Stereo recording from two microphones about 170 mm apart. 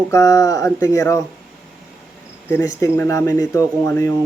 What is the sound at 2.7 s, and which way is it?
Speech, 15° left (ahead or behind).